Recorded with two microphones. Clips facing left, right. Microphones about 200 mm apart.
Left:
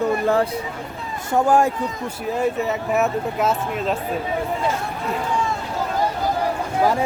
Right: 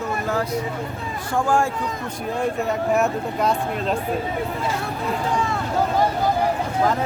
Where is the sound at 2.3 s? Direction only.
5° left (ahead or behind).